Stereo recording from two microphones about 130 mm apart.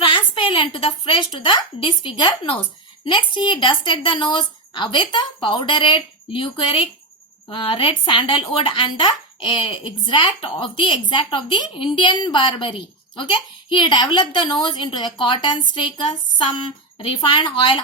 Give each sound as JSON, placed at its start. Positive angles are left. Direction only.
{"t": 0.0, "sound": "a woman's voice", "side_deg": 40}
{"t": 17.0, "sound": "speech", "side_deg": 45}